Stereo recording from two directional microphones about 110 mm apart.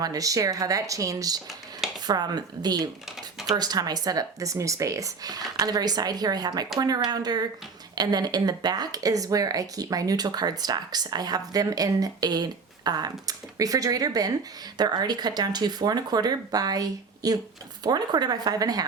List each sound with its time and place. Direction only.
0.0 s speech: 35° right (ahead or behind)